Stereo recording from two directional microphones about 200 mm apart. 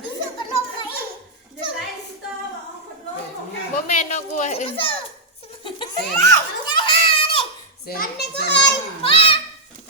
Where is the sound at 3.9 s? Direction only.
35° left (ahead or behind).